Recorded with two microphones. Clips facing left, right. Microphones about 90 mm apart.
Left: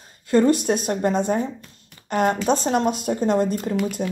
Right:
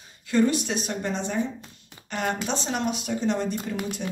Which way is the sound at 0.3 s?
45° left (ahead or behind).